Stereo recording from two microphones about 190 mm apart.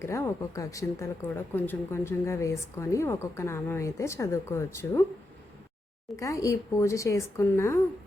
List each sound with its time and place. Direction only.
0.0 s a woman's voice: 15° left (ahead or behind)
6.1 s a woman's voice: 15° left (ahead or behind)